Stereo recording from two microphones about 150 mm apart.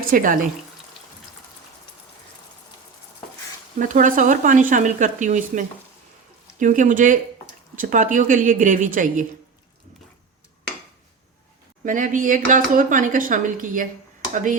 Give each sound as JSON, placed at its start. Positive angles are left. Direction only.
{"t": 0.0, "sound": "speech", "side_deg": -65}
{"t": 3.8, "sound": "speech", "side_deg": -60}
{"t": 11.9, "sound": "speech", "side_deg": -60}